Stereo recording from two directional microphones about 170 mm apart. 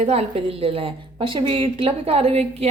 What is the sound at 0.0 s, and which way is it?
A woman's voice, 35° right (ahead or behind).